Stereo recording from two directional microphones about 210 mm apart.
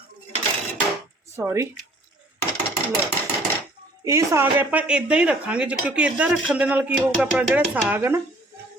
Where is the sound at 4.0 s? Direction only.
15° right (ahead or behind).